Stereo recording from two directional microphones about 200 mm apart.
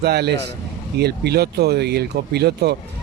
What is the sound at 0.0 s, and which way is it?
Speech, 55° right (ahead or behind).